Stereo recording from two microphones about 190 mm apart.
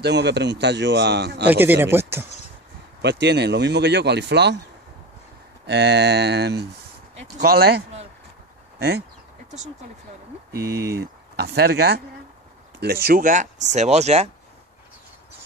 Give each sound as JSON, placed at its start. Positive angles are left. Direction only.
{"t": 0.0, "sound": "speech", "side_deg": -60}
{"t": 1.5, "sound": "speech", "side_deg": -10}
{"t": 3.0, "sound": "speech", "side_deg": -60}
{"t": 5.7, "sound": "speech", "side_deg": -60}
{"t": 10.7, "sound": "speech", "side_deg": -15}
{"t": 11.0, "sound": "speech", "side_deg": -55}